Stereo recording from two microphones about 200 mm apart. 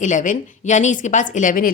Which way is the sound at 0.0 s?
40° left (ahead or behind).